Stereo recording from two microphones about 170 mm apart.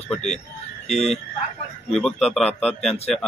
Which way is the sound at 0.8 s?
40° left (ahead or behind).